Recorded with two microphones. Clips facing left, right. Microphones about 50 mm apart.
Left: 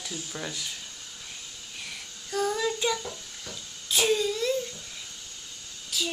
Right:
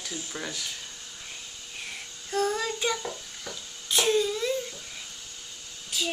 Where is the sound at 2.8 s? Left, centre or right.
Centre.